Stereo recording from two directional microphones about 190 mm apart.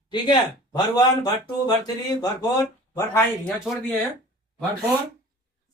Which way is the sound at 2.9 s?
15° left (ahead or behind).